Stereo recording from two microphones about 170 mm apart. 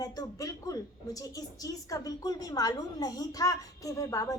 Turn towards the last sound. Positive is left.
turn(degrees=20)  # may be behind; listen again after turning